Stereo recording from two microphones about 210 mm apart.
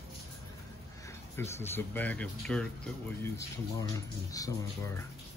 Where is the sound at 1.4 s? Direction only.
10° left (ahead or behind).